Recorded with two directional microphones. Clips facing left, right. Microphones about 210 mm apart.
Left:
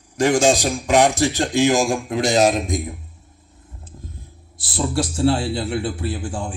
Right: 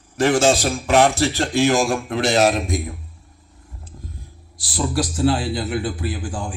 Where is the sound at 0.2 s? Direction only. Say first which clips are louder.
Even; 15° left (ahead or behind).